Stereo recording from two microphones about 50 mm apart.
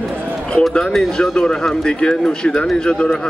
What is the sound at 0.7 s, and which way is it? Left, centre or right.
Speech, centre.